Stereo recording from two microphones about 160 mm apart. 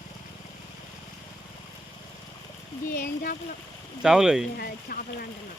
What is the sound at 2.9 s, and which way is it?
Speech, 65° left (ahead or behind).